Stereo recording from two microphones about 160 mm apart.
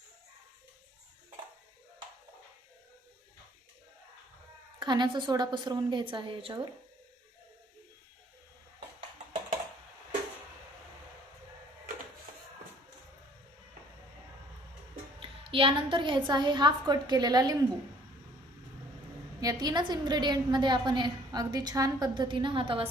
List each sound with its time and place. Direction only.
4.8 s a woman's voice: 30° right (ahead or behind)
15.2 s a woman's voice: 35° right (ahead or behind)
19.4 s a woman's voice: 25° right (ahead or behind)